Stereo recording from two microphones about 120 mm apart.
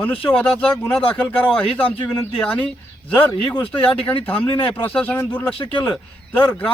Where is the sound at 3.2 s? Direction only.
15° left (ahead or behind).